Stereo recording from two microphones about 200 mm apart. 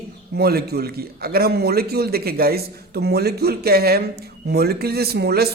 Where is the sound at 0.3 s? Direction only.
50° right (ahead or behind).